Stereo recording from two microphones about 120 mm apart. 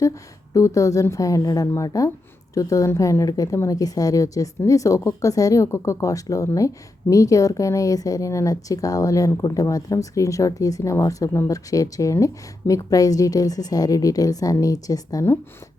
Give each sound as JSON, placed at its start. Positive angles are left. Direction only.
{"t": 0.5, "sound": "speech", "side_deg": 25}